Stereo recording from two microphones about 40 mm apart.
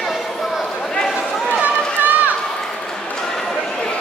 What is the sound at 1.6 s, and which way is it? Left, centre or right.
Run, right.